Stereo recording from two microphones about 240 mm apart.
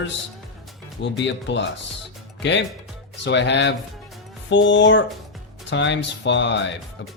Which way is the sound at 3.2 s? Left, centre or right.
Left.